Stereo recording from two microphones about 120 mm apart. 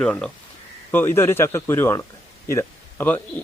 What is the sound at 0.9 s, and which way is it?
Speech, 20° left (ahead or behind).